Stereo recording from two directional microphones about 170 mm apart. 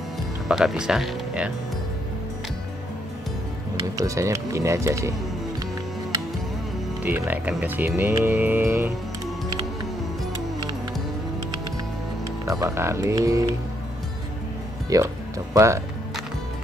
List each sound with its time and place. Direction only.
0.5 s speech: centre (ahead or behind)
4.0 s speech: 20° right (ahead or behind)
7.0 s speech: 10° right (ahead or behind)
10.3 s music: 25° right (ahead or behind)
12.4 s speech: 15° right (ahead or behind)
14.9 s speech: 20° right (ahead or behind)